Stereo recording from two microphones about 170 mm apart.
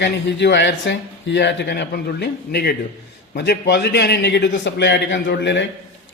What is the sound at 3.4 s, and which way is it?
Speech, 85° left.